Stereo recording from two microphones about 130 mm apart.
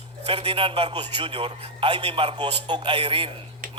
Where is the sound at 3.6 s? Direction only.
90° right.